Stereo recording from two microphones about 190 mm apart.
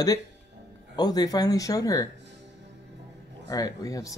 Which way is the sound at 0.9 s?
20° left (ahead or behind).